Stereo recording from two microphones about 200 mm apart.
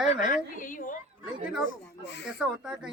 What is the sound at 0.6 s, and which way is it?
Speech, 40° left (ahead or behind).